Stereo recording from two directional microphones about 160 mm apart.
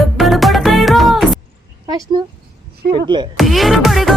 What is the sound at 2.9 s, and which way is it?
Speech, 30° right (ahead or behind).